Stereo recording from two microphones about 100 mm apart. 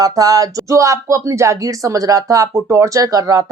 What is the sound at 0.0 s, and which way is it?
Speech, 40° right (ahead or behind).